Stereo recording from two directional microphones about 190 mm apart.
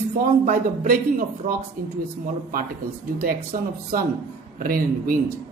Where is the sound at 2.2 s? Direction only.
50° right (ahead or behind).